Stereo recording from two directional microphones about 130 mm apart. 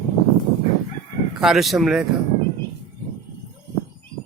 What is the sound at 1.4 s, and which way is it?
Speech, centre (ahead or behind).